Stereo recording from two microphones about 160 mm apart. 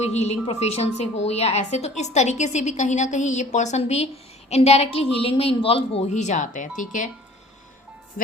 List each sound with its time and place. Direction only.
0.0 s a woman's voice: 45° left (ahead or behind)